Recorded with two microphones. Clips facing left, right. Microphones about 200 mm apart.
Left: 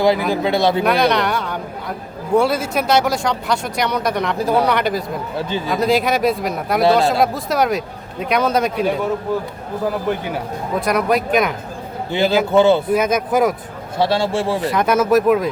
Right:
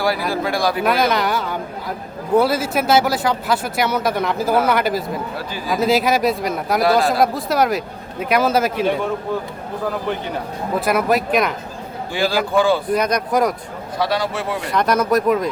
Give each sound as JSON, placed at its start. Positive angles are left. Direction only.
{"t": 0.0, "sound": "speech", "side_deg": 20}
{"t": 0.9, "sound": "speech", "side_deg": 0}
{"t": 5.4, "sound": "speech", "side_deg": 25}
{"t": 5.7, "sound": "speech", "side_deg": 0}
{"t": 10.1, "sound": "speech", "side_deg": 10}
{"t": 10.8, "sound": "speech", "side_deg": -5}
{"t": 12.1, "sound": "speech", "side_deg": 20}
{"t": 12.9, "sound": "speech", "side_deg": 5}
{"t": 14.0, "sound": "speech", "side_deg": 25}
{"t": 14.7, "sound": "speech", "side_deg": 5}